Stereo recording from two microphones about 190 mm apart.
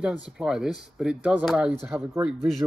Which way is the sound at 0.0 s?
5° right (ahead or behind).